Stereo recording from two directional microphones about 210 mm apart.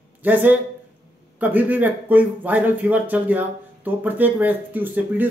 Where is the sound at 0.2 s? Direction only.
10° right (ahead or behind).